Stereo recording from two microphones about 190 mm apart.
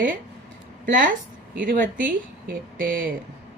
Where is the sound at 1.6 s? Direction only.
45° right (ahead or behind).